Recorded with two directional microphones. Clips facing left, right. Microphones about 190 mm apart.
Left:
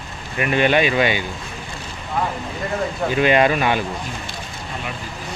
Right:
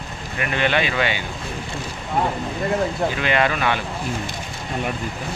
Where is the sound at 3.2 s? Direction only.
20° left (ahead or behind).